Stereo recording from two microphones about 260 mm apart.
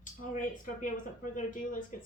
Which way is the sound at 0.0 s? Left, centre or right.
Left.